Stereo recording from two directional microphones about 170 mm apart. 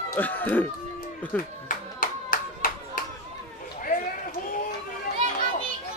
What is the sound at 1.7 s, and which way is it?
Clapping, 55° left (ahead or behind).